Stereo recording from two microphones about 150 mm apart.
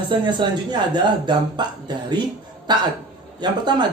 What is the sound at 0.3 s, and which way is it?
Speech, 30° right (ahead or behind).